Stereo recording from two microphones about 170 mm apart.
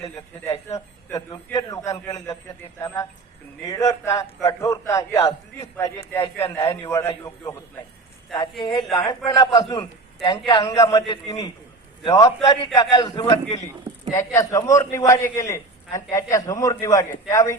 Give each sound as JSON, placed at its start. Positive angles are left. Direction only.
{"t": 0.7, "sound": "a man's voice", "side_deg": 20}
{"t": 8.7, "sound": "a woman's voice", "side_deg": 0}
{"t": 9.0, "sound": "a man's voice", "side_deg": 25}